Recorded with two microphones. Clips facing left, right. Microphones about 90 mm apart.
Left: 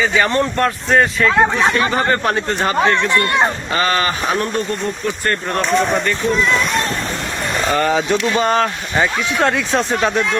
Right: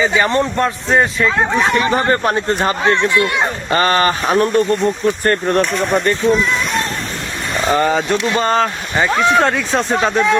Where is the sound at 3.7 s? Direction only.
40° right (ahead or behind).